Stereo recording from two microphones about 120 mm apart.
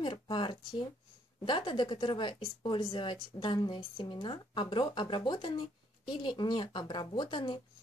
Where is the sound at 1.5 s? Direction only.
40° left (ahead or behind).